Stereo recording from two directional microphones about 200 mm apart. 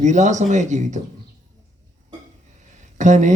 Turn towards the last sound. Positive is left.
turn(degrees=-40)  # may be behind; listen again after turning